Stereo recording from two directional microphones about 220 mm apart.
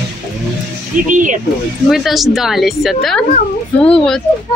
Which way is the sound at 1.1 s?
35° right (ahead or behind).